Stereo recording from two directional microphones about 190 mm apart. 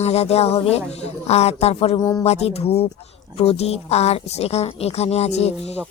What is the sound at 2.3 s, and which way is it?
Speech, 35° left (ahead or behind).